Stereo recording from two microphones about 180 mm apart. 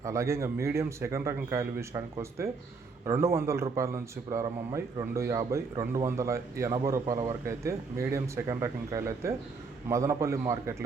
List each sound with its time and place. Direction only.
0.0 s a man's voice: 15° right (ahead or behind)